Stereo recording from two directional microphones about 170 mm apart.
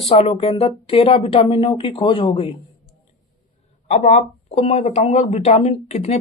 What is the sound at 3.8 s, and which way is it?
Speech, 40° left (ahead or behind).